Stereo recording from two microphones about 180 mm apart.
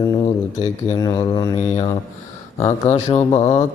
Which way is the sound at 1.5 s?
35° left (ahead or behind).